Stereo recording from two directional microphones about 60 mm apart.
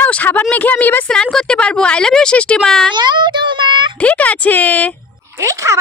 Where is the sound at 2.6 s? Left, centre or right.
Centre.